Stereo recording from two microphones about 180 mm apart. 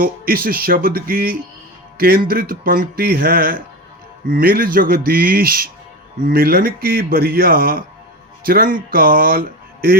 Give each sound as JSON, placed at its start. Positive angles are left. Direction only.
{"t": 0.0, "sound": "speech", "side_deg": -55}